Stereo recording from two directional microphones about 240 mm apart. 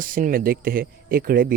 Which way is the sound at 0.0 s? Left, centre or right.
Right.